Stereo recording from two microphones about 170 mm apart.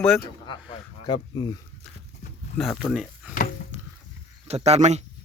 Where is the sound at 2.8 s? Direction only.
Centre (ahead or behind).